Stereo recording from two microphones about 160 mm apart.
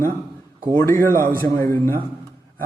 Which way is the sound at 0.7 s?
15° left (ahead or behind).